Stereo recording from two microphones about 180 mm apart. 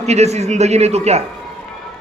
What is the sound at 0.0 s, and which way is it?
A man's voice, 40° right (ahead or behind).